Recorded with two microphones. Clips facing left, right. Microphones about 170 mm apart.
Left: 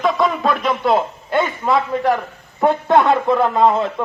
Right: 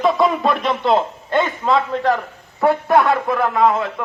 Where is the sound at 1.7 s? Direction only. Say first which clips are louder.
Even; 20° left (ahead or behind).